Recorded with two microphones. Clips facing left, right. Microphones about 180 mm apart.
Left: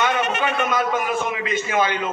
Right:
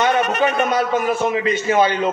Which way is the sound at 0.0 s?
40° right (ahead or behind).